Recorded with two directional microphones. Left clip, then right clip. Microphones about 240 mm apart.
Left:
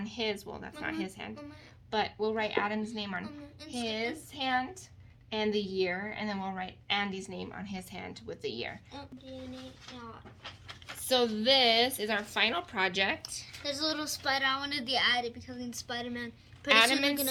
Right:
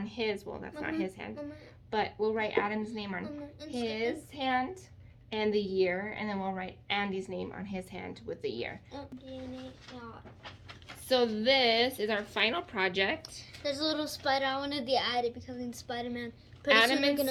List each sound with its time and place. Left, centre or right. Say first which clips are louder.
0.0 s a woman's voice: right 1 dB; left
11.1 s a woman's voice: even; left